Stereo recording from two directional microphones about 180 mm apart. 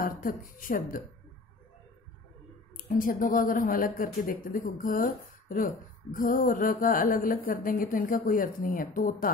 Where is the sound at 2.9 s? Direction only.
50° left (ahead or behind).